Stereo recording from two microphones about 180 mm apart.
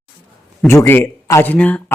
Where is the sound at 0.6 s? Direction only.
15° left (ahead or behind).